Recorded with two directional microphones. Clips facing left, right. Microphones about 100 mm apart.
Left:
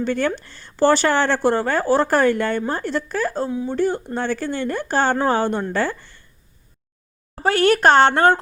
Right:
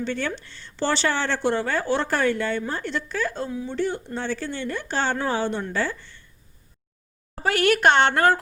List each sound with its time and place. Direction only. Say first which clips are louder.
0.0 s speech: left 6 dB; 50° left (ahead or behind)
7.4 s speech: left 4 dB; 35° left (ahead or behind)